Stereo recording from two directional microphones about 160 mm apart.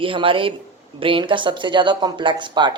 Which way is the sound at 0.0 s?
35° right (ahead or behind).